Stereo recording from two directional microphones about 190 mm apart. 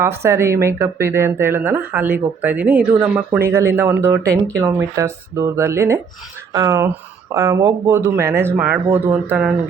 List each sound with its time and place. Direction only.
0.0 s speech: 15° right (ahead or behind)